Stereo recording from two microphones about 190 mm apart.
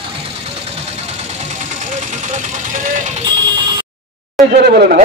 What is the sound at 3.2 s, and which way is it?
Music, 25° right (ahead or behind).